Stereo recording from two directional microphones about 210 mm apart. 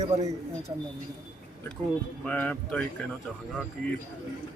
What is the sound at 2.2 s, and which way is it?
Speech, 5° left (ahead or behind).